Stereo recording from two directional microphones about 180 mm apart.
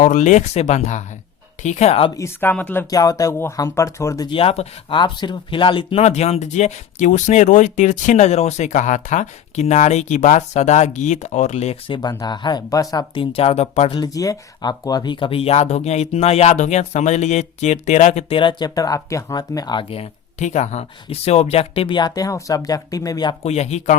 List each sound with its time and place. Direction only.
0.0 s speech: 45° left (ahead or behind)
2.1 s speech: 15° left (ahead or behind); by 11.9 s 35° left (ahead or behind)
11.9 s speech: 25° left (ahead or behind)
14.0 s speech: 20° left (ahead or behind)
23.4 s speech: 35° left (ahead or behind)